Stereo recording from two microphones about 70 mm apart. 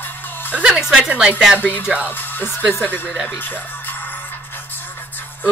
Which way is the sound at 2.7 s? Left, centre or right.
Left.